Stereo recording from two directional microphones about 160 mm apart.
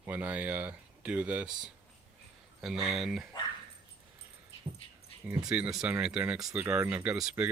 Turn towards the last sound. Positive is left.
turn(degrees=-5)  # may be behind; listen again after turning